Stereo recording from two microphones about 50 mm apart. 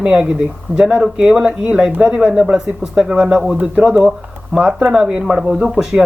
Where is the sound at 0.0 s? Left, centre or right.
Centre.